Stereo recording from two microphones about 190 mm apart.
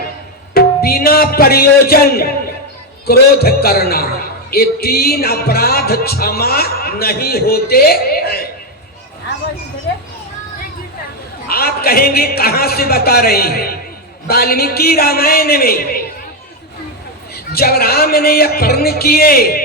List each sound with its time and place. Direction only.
0.5 s music: 55° left (ahead or behind)
11.4 s music: 55° left (ahead or behind)
17.3 s music: 55° left (ahead or behind)